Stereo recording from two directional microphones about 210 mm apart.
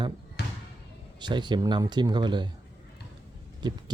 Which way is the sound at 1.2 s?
20° right (ahead or behind).